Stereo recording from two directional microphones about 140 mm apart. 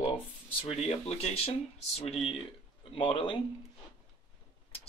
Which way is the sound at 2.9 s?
40° left (ahead or behind).